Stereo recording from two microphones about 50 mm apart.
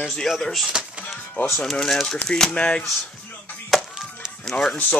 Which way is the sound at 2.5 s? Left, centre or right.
Left.